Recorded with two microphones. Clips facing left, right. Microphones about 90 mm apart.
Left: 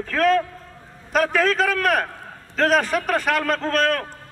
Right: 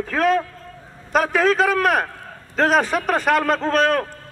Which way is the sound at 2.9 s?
5° right (ahead or behind).